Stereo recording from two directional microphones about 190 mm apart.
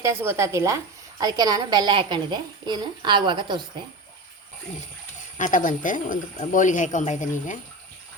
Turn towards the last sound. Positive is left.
turn(degrees=40)  # may be behind; listen again after turning